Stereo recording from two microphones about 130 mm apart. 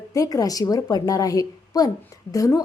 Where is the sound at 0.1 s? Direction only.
25° left (ahead or behind).